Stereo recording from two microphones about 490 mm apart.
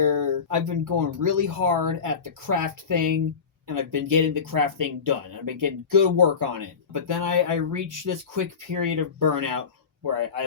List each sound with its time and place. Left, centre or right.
0.0 s speech: right